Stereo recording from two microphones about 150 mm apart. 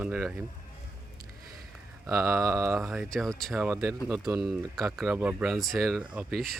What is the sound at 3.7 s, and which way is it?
Mantra, 20° right (ahead or behind).